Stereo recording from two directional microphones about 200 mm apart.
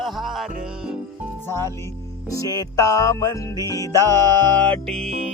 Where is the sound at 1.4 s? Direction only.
10° left (ahead or behind).